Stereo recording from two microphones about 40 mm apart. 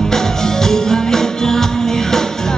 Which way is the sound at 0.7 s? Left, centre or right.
Centre.